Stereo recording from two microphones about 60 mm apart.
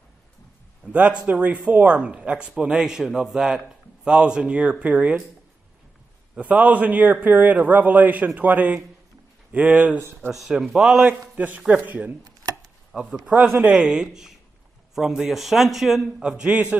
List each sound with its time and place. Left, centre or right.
0.9 s speech: right
6.4 s speech: right
10.3 s a man's voice: centre
11.1 s a man's voice: right
12.9 s a man's voice: centre
16.2 s a man's voice: centre
16.4 s speech: right